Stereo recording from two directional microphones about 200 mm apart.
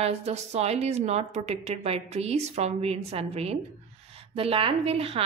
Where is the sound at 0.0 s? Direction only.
35° right (ahead or behind).